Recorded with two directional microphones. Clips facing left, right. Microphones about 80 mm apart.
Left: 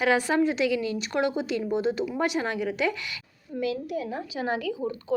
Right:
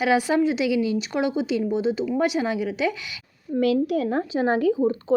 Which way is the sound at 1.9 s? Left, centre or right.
Centre.